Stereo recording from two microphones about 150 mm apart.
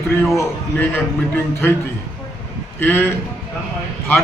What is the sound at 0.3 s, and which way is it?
Speech, 10° left (ahead or behind).